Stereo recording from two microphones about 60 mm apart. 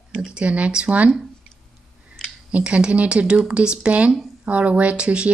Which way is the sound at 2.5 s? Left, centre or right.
Centre.